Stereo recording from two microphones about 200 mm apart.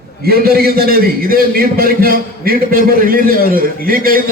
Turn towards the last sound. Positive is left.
turn(degrees=-45)  # may be behind; listen again after turning